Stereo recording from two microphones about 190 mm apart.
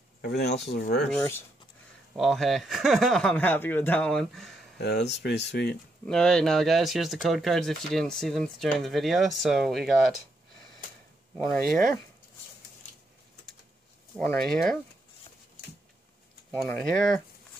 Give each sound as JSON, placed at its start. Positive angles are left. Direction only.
{"t": 0.2, "sound": "speech", "side_deg": 60}
{"t": 2.1, "sound": "speech", "side_deg": 0}
{"t": 4.7, "sound": "speech", "side_deg": 60}
{"t": 6.0, "sound": "speech", "side_deg": 5}
{"t": 11.3, "sound": "speech", "side_deg": 0}
{"t": 14.1, "sound": "speech", "side_deg": 0}
{"t": 16.6, "sound": "speech", "side_deg": 0}